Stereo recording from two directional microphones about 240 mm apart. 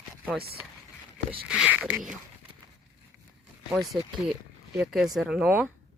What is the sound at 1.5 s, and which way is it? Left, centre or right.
Speech, centre.